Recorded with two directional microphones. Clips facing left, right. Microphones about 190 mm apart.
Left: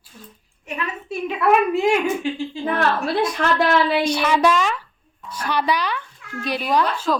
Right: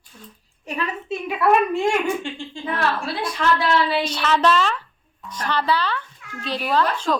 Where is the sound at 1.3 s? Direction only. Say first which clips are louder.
Left 1 dB; centre (ahead or behind).